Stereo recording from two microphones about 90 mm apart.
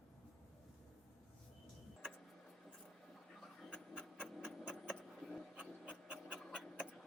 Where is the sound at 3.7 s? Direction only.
10° left (ahead or behind).